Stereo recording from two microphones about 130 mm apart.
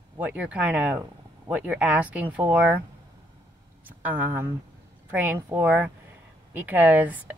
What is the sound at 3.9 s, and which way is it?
Speech, 10° right (ahead or behind).